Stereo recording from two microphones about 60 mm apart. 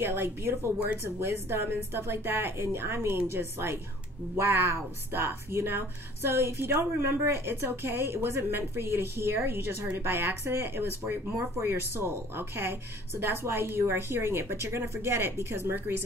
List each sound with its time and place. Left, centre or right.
0.0 s speech: right